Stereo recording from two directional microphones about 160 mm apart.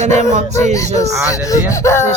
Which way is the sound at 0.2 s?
50° right (ahead or behind).